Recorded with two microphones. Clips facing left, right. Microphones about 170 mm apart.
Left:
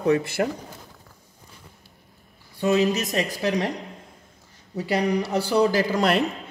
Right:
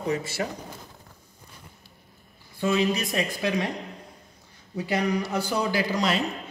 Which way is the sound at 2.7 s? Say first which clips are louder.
Left 3 dB; 40° left (ahead or behind).